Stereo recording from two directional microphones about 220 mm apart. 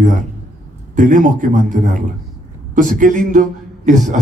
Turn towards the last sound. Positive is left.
turn(degrees=-35)  # may be behind; listen again after turning